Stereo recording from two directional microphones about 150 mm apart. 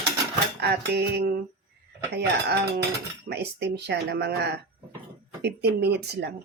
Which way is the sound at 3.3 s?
90° right.